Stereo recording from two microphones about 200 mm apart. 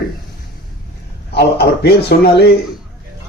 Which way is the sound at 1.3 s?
55° left (ahead or behind).